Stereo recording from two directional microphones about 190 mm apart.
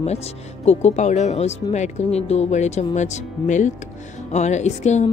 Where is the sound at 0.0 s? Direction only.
35° left (ahead or behind).